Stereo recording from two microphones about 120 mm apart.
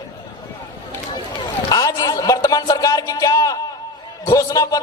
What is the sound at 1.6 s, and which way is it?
Speech, 30° left (ahead or behind).